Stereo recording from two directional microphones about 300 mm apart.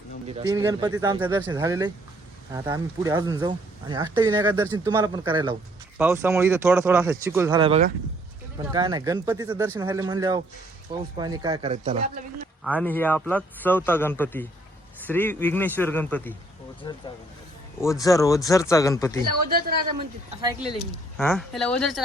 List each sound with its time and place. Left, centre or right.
0.3 s speech: centre
8.7 s speech: centre
12.6 s a man's voice: centre
19.5 s speech: right
20.7 s speech: centre